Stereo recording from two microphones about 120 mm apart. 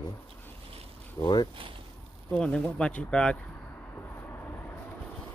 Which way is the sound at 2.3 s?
10° left (ahead or behind).